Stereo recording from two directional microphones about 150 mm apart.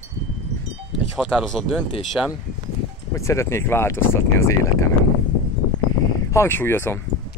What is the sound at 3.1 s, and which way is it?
Speech, 20° left (ahead or behind).